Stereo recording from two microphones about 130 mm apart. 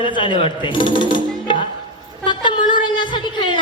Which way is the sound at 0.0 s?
40° left (ahead or behind).